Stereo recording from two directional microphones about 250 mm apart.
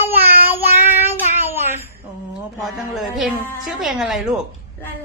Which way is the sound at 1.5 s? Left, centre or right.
Centre.